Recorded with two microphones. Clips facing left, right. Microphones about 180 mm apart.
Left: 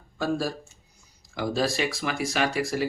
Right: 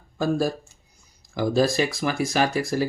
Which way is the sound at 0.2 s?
45° right (ahead or behind).